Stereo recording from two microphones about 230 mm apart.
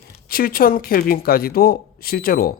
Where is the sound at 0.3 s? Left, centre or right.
Left.